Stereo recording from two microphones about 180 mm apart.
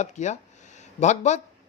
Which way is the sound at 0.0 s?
40° left (ahead or behind).